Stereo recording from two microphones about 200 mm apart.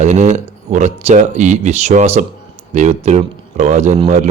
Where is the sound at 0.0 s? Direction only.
35° right (ahead or behind).